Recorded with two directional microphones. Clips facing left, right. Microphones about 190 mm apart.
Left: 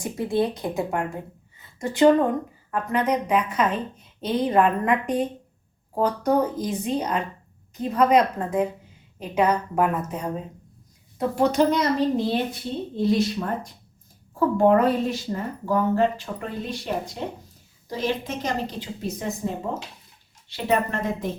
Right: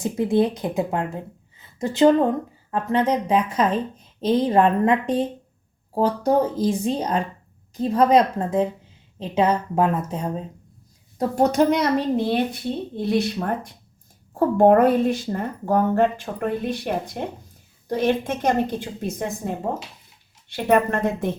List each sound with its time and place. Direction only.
0.0 s a woman's voice: 20° right (ahead or behind)
11.2 s a woman's voice: 45° right (ahead or behind)
14.3 s a woman's voice: 55° right (ahead or behind)